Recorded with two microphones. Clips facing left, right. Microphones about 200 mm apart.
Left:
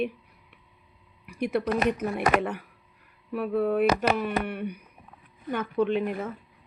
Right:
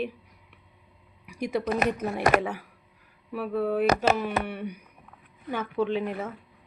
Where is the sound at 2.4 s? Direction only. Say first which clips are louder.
Left 1 dB; 5° right (ahead or behind).